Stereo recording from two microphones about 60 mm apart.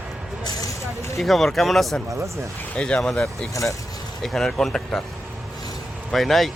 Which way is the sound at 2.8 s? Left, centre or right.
Centre.